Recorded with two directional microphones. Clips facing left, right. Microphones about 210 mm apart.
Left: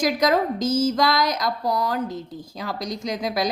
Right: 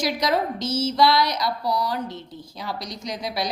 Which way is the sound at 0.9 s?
45° left (ahead or behind).